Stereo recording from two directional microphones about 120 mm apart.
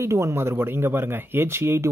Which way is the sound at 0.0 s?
25° right (ahead or behind).